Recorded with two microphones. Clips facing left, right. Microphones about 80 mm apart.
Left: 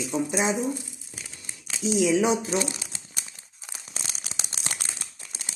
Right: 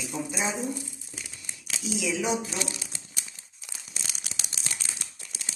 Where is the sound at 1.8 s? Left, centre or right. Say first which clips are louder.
Left 8 dB; left.